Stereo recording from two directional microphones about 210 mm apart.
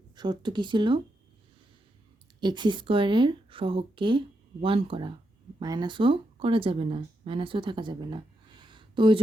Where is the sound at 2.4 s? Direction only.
20° right (ahead or behind).